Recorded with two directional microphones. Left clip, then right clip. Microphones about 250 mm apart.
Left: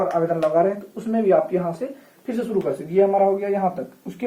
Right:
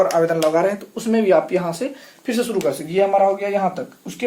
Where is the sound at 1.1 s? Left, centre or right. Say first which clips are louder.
Right 2 dB; right.